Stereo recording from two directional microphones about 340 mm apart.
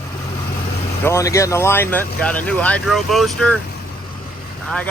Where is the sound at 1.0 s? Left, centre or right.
Centre.